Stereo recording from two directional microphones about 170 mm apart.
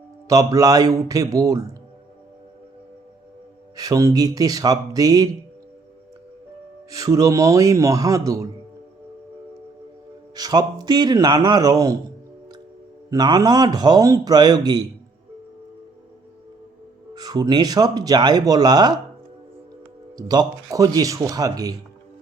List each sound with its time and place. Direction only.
0.3 s a man's voice: 20° right (ahead or behind)
3.8 s a man's voice: 20° right (ahead or behind)
6.9 s a man's voice: 20° right (ahead or behind)
10.3 s a man's voice: 25° right (ahead or behind)
13.1 s a man's voice: 20° right (ahead or behind)
17.2 s a man's voice: 25° right (ahead or behind)
20.1 s a man's voice: 25° right (ahead or behind)